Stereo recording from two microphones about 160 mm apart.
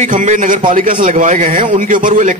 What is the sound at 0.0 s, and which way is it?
A man's voice, 50° right (ahead or behind).